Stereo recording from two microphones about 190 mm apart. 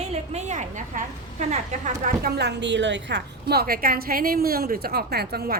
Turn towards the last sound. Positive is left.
turn(degrees=-55)  # may be behind; listen again after turning